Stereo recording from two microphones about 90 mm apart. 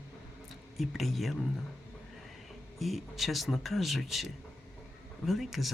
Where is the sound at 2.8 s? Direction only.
Centre (ahead or behind).